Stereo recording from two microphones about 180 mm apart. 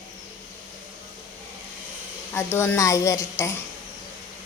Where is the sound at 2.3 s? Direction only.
15° left (ahead or behind).